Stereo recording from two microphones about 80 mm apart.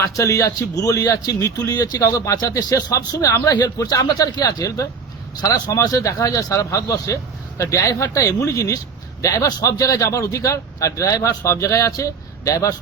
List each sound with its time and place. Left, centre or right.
0.0 s a man's voice: left